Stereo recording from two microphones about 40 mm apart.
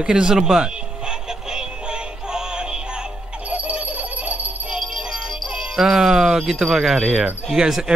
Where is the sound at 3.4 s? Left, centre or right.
Right.